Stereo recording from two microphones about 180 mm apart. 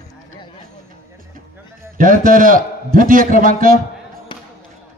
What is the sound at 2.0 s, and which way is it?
A man's voice, 50° right (ahead or behind).